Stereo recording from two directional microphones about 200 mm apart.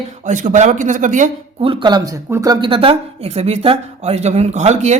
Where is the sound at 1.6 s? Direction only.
25° right (ahead or behind).